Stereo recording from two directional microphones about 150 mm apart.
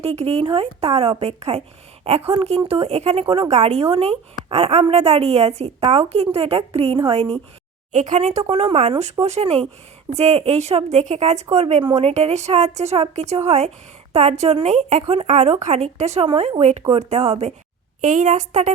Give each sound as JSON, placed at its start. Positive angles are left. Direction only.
{"t": 0.0, "sound": "a woman's voice", "side_deg": -40}
{"t": 7.9, "sound": "a woman's voice", "side_deg": -55}
{"t": 18.0, "sound": "a woman's voice", "side_deg": -55}